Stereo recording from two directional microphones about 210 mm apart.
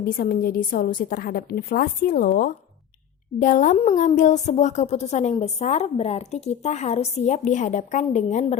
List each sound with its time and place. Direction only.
0.0 s a woman's voice: 45° left (ahead or behind)